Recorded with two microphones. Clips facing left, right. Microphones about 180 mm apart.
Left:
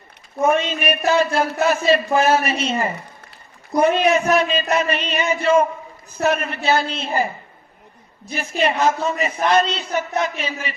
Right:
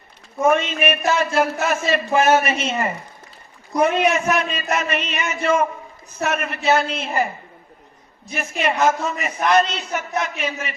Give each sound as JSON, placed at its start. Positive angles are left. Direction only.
{"t": 0.7, "sound": "a man's voice", "side_deg": 35}
{"t": 3.8, "sound": "a man's voice", "side_deg": 30}
{"t": 8.3, "sound": "a man's voice", "side_deg": 30}